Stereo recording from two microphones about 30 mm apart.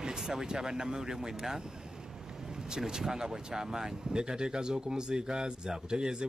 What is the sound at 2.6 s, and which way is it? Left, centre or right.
Speech, right.